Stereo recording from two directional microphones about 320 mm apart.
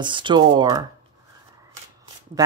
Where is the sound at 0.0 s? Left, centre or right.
Centre.